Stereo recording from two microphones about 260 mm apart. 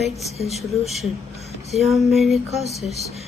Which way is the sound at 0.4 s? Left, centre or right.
Left.